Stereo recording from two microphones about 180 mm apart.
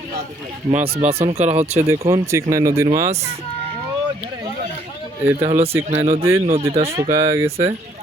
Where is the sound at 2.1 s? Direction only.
15° right (ahead or behind).